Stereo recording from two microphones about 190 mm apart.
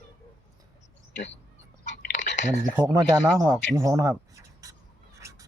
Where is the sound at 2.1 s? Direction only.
40° left (ahead or behind).